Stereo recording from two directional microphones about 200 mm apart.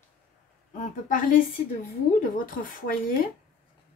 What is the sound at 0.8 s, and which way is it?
Speech, 40° left (ahead or behind).